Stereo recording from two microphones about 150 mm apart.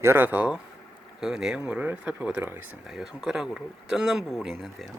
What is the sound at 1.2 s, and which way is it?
Speech, 5° right (ahead or behind).